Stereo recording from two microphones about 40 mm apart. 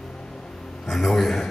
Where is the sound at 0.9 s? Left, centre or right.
Centre.